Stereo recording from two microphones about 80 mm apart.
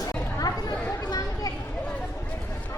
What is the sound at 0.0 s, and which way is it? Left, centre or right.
Chatter, left.